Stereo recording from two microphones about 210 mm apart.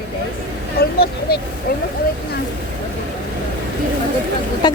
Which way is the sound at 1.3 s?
45° left (ahead or behind).